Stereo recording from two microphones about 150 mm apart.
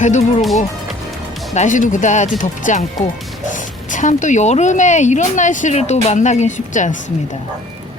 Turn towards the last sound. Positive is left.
turn(degrees=50)  # may be behind; listen again after turning